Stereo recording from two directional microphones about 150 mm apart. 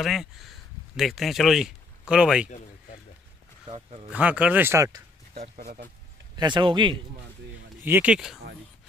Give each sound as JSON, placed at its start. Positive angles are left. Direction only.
{"t": 0.0, "sound": "speech", "side_deg": 0}
{"t": 3.7, "sound": "speech", "side_deg": -40}
{"t": 4.1, "sound": "speech", "side_deg": -10}
{"t": 5.6, "sound": "speech", "side_deg": -90}
{"t": 6.3, "sound": "speech", "side_deg": -30}
{"t": 7.8, "sound": "speech", "side_deg": -10}